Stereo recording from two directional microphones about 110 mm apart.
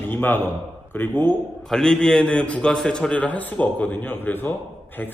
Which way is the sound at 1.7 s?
5° left (ahead or behind).